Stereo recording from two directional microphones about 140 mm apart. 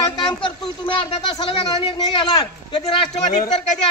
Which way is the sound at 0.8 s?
35° left (ahead or behind).